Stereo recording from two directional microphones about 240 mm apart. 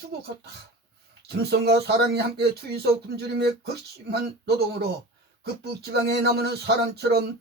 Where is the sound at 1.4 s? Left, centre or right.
Right.